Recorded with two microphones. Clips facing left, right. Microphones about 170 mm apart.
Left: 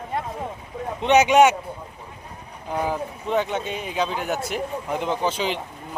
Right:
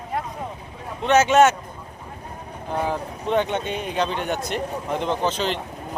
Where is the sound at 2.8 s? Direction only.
5° left (ahead or behind).